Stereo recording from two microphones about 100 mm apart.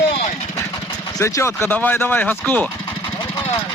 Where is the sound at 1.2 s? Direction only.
30° left (ahead or behind).